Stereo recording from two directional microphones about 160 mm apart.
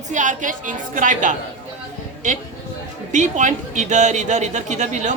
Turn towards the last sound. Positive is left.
turn(degrees=-50)  # may be behind; listen again after turning